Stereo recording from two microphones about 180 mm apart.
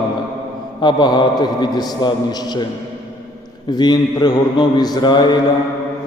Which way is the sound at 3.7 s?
25° left (ahead or behind).